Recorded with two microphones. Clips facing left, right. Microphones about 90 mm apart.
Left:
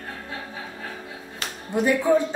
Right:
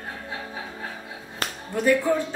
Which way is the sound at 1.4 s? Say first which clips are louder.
Right 4 dB; 45° right (ahead or behind).